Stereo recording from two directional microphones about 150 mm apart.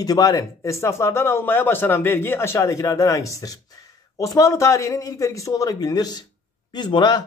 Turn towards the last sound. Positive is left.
turn(degrees=30)  # may be behind; listen again after turning